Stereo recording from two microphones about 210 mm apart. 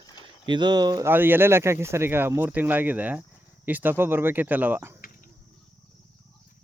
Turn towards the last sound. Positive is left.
turn(degrees=-10)  # may be behind; listen again after turning